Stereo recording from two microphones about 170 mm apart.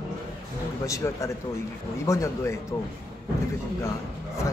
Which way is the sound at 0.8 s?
20° left (ahead or behind).